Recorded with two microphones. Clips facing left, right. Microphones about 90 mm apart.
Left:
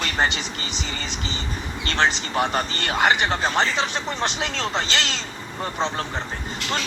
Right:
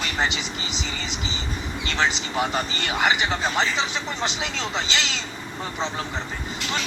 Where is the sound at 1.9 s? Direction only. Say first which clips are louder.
Left 3 dB; 50° left (ahead or behind).